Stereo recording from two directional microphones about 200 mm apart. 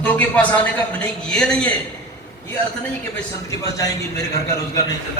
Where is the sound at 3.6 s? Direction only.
15° left (ahead or behind).